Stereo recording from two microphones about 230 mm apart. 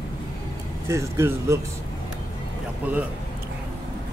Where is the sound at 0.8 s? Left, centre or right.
Centre.